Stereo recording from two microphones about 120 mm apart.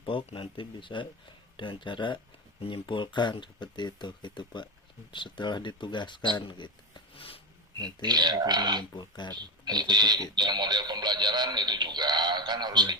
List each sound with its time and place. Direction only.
0.0 s speech: 45° left (ahead or behind)
7.8 s speech: 35° right (ahead or behind)
9.0 s speech: 40° left (ahead or behind)
9.3 s speech: 35° right (ahead or behind)